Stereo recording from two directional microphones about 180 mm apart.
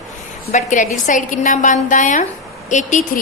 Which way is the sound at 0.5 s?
45° left (ahead or behind).